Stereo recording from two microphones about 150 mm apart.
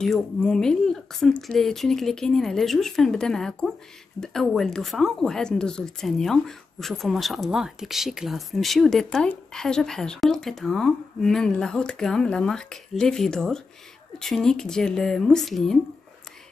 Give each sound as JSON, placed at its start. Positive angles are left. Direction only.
{"t": 0.0, "sound": "speech", "side_deg": 5}